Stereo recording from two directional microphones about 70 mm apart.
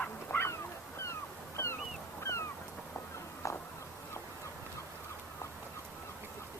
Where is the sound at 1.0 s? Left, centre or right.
Left.